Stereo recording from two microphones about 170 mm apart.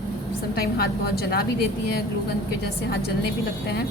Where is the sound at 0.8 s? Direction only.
65° left (ahead or behind).